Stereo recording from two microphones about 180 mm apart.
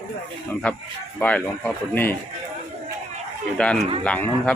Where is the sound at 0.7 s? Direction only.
5° left (ahead or behind).